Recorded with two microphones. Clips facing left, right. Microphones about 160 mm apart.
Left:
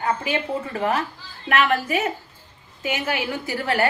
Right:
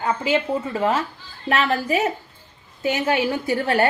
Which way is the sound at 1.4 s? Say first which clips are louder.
Even; 35° right (ahead or behind).